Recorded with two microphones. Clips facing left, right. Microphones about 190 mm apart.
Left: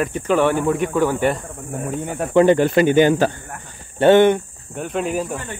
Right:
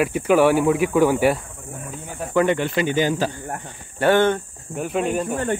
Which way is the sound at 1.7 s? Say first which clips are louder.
Left 9 dB; 60° left (ahead or behind).